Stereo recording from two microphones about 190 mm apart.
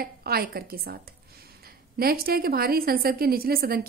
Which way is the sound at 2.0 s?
50° right (ahead or behind).